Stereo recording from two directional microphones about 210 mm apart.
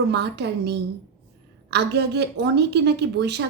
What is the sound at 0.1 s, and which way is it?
A woman's voice, 55° right (ahead or behind).